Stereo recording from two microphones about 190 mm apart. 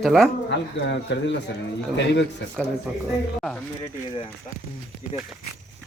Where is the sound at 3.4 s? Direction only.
5° left (ahead or behind).